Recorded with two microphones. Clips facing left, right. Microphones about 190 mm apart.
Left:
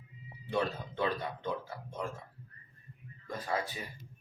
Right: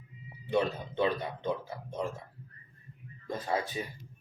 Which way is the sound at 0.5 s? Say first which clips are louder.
Right 4 dB; 20° right (ahead or behind).